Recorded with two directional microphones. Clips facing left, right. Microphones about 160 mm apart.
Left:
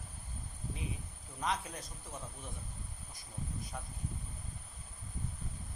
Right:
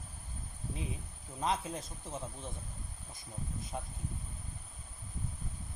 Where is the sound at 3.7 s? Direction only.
25° right (ahead or behind).